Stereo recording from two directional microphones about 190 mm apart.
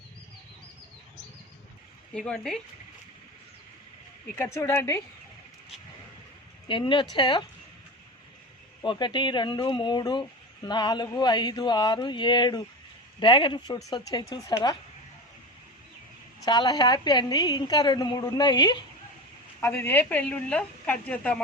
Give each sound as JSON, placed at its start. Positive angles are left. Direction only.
{"t": 2.1, "sound": "speech", "side_deg": 5}
{"t": 4.4, "sound": "a woman's voice", "side_deg": 15}
{"t": 6.7, "sound": "speech", "side_deg": 25}
{"t": 8.8, "sound": "speech", "side_deg": 25}
{"t": 16.5, "sound": "a woman's voice", "side_deg": 25}